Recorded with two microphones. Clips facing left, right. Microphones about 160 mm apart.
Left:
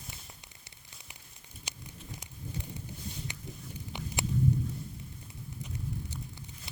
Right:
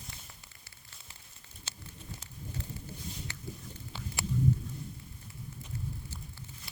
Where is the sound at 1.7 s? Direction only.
15° left (ahead or behind).